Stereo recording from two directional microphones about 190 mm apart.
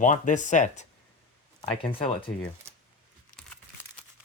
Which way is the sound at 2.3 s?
80° left.